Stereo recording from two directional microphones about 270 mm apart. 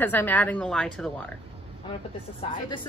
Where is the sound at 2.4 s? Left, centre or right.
Centre.